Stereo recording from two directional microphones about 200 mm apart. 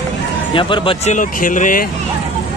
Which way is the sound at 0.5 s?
25° left (ahead or behind).